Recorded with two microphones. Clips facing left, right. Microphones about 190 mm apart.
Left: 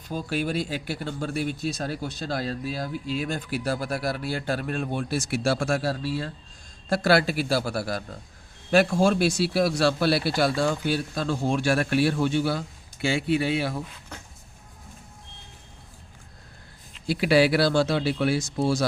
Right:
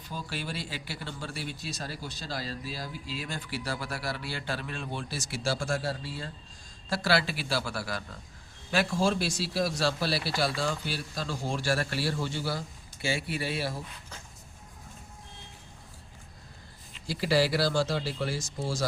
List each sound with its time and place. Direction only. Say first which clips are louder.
0.1 s speech: left 9 dB; 50° left (ahead or behind); by 6.3 s 75° left (ahead or behind)
6.9 s speech: left 7 dB; 50° left (ahead or behind)
8.7 s speech: left 7 dB; 50° left (ahead or behind)
17.1 s speech: left 6 dB; 65° left (ahead or behind)